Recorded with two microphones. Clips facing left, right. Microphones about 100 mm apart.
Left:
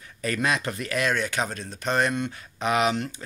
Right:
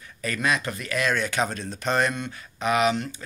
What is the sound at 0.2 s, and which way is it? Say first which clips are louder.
Speech: left 2 dB; 35° left (ahead or behind).